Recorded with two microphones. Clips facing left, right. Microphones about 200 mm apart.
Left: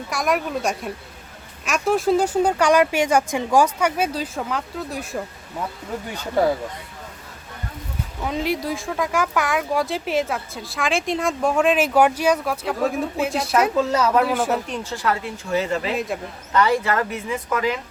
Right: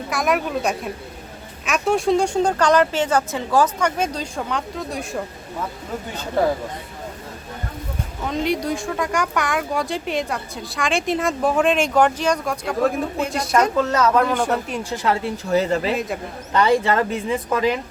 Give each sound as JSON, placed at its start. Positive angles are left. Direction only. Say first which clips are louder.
{"t": 0.1, "sound": "speech", "louder": "right 1 dB", "side_deg": 0}
{"t": 8.3, "sound": "speech", "louder": "right 2 dB", "side_deg": 5}
{"t": 14.7, "sound": "a woman's voice", "louder": "right 2 dB", "side_deg": -15}
{"t": 15.0, "sound": "speech", "louder": "right 3 dB", "side_deg": -30}
{"t": 16.5, "sound": "speech", "louder": "right 2 dB", "side_deg": -25}